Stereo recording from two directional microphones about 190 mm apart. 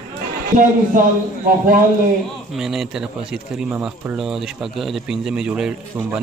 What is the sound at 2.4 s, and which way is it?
Speech, centre (ahead or behind).